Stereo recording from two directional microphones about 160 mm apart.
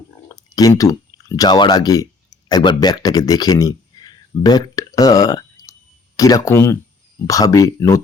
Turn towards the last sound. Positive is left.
turn(degrees=20)  # may be behind; listen again after turning